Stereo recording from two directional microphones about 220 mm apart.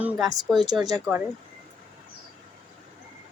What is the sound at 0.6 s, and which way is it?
Speech, 20° right (ahead or behind).